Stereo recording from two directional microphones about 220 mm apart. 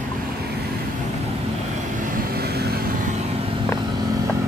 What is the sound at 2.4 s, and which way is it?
Vehicle, 45° right (ahead or behind).